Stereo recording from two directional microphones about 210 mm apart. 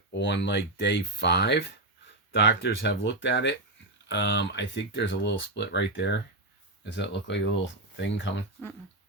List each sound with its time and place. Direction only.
0.1 s speech: 60° left (ahead or behind)